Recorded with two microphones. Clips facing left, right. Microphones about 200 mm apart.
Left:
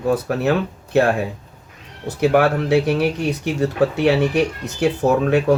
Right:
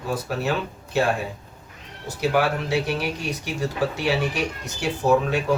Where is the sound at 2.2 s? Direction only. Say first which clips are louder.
Left 6 dB; 55° left (ahead or behind).